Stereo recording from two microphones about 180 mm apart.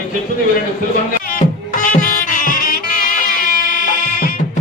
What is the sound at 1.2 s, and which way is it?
Music, 50° left (ahead or behind).